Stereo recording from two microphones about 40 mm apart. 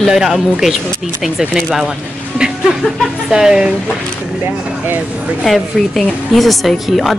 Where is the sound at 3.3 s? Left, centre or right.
Centre.